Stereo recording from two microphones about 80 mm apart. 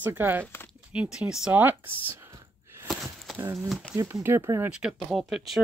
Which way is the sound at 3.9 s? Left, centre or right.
Right.